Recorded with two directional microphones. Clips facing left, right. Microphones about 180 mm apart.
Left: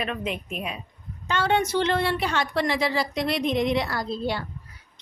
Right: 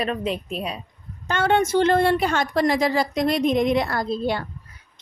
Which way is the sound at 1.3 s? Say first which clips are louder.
Right 4 dB; 50° right (ahead or behind).